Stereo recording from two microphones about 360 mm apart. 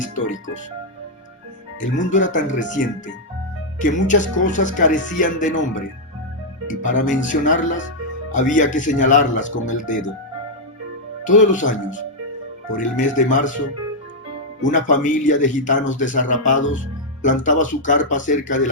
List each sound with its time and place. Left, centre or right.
1.8 s speech: left
7.0 s speech: left
11.2 s speech: left
12.7 s speech: left
14.6 s speech: left